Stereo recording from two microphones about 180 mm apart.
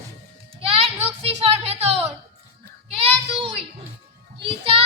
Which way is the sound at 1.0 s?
35° right (ahead or behind).